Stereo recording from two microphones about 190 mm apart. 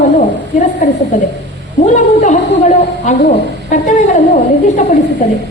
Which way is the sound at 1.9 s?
40° left (ahead or behind).